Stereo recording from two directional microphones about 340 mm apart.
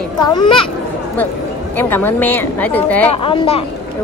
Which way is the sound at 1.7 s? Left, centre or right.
Centre.